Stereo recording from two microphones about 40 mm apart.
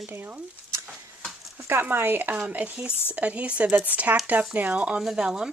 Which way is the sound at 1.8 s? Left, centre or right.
Right.